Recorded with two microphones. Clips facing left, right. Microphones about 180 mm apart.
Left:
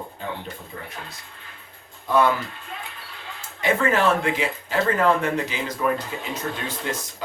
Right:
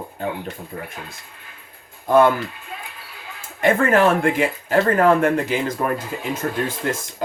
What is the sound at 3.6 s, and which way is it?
Speech, 50° right (ahead or behind).